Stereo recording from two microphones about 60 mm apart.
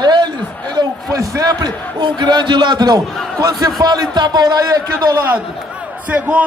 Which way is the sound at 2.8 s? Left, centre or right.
Right.